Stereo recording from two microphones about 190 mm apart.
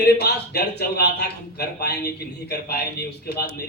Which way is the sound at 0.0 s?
60° left (ahead or behind).